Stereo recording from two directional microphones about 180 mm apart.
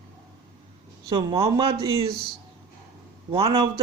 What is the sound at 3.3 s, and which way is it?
Speech, 30° right (ahead or behind).